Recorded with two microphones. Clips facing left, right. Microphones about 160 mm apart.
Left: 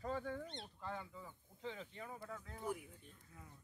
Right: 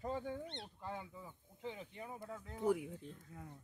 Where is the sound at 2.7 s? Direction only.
80° right.